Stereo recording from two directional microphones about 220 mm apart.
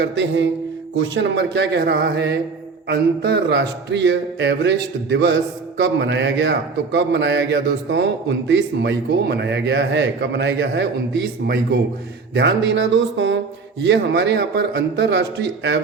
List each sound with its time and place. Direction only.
0.0 s a man's voice: 55° right (ahead or behind)